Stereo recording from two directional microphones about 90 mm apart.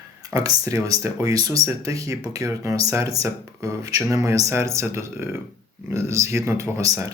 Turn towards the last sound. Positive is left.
turn(degrees=-35)  # may be behind; listen again after turning